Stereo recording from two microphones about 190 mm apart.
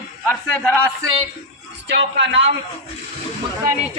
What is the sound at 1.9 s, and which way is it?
Speech, 75° right (ahead or behind).